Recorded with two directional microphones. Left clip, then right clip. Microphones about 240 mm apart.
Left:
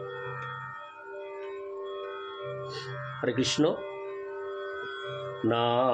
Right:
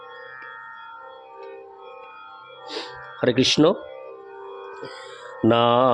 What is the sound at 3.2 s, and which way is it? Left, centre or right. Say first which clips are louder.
Mantra: right 9 dB; right.